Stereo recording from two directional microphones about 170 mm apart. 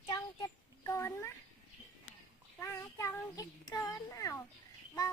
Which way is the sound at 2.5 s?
15° left (ahead or behind).